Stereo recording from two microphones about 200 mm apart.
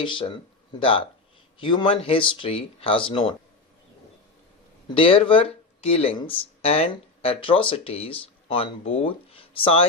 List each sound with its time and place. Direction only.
0.0 s speech: 25° left (ahead or behind)
4.9 s speech: 25° left (ahead or behind)